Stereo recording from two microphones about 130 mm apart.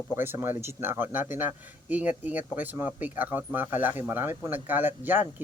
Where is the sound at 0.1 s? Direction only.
15° right (ahead or behind).